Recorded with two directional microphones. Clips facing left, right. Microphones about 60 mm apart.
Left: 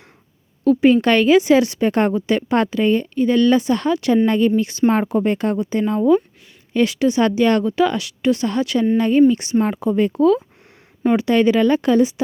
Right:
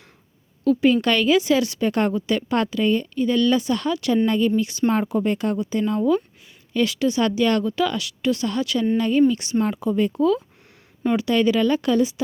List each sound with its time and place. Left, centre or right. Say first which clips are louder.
0.6 s a woman's voice: left 4 dB; left
9.7 s speech: left 3 dB; left
11.2 s a woman's voice: left 3 dB; left